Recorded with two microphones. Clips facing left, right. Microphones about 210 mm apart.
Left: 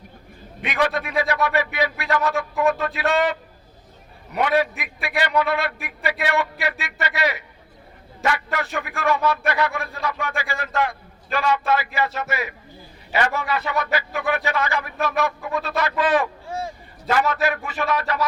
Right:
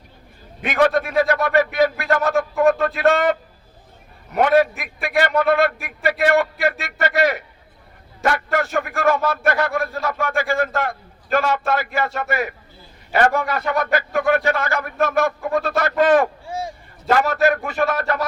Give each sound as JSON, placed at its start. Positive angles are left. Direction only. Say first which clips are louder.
{"t": 0.7, "sound": "a man's voice", "louder": "right 5 dB", "side_deg": -45}
{"t": 4.4, "sound": "a man's voice", "louder": "right 5 dB", "side_deg": -50}